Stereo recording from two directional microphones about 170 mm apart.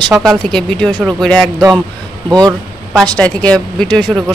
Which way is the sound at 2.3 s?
25° right (ahead or behind).